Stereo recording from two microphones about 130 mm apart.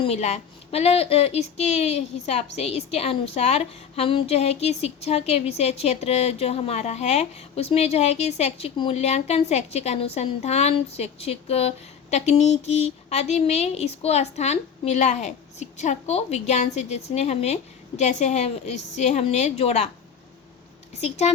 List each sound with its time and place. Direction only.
0.0 s a woman's voice: 55° left (ahead or behind)
20.9 s speech: 55° left (ahead or behind)